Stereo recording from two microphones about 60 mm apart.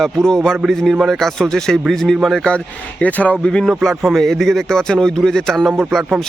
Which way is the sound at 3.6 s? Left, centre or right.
Centre.